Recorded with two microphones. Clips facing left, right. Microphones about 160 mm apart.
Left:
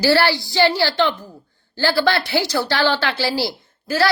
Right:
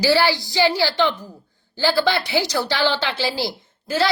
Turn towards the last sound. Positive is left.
turn(degrees=-20)  # may be behind; listen again after turning